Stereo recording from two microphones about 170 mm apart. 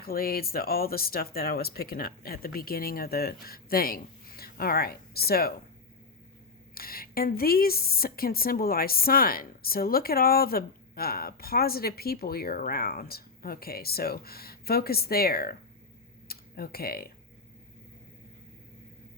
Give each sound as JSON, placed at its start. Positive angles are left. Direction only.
{"t": 0.0, "sound": "a woman's voice", "side_deg": 60}
{"t": 6.7, "sound": "a woman's voice", "side_deg": 60}
{"t": 16.2, "sound": "tick-tock", "side_deg": 60}